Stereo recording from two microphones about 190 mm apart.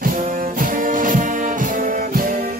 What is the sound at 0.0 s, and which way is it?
Music, 45° right (ahead or behind).